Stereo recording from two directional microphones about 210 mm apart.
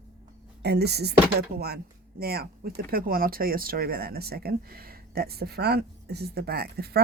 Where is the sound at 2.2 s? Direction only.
45° right (ahead or behind).